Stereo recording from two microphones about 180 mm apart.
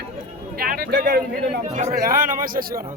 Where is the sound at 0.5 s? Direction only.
55° right (ahead or behind).